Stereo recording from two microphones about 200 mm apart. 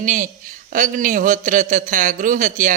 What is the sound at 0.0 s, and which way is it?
A man's voice, 40° right (ahead or behind).